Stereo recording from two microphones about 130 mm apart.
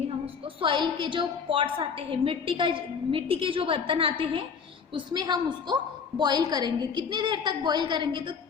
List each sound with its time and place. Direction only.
0.6 s a woman's voice: 40° right (ahead or behind)
4.9 s a woman's voice: 35° right (ahead or behind)